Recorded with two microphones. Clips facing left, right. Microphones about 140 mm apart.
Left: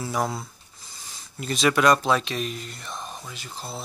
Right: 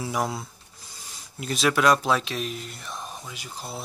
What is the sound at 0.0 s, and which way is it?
Speech, 5° right (ahead or behind).